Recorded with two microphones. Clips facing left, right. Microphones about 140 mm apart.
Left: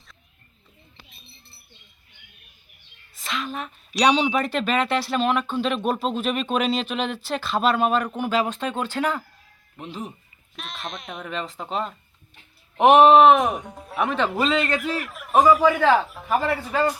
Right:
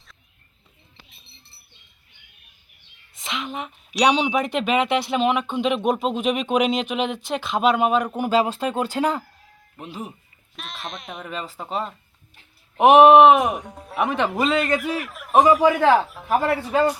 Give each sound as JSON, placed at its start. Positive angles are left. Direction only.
{"t": 3.2, "sound": "speech", "side_deg": -20}
{"t": 8.3, "sound": "speech", "side_deg": -35}
{"t": 8.5, "sound": "speech", "side_deg": -10}
{"t": 9.0, "sound": "speech", "side_deg": -30}
{"t": 9.7, "sound": "speech", "side_deg": -5}
{"t": 13.4, "sound": "a man's voice", "side_deg": 0}